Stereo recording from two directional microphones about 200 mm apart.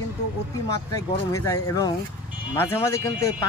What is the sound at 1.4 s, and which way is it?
Speech, 15° left (ahead or behind).